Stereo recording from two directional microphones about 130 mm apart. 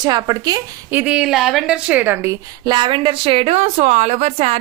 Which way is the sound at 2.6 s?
35° right (ahead or behind).